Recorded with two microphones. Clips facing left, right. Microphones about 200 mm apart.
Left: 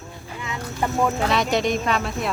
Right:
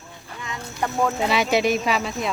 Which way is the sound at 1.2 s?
5° right (ahead or behind).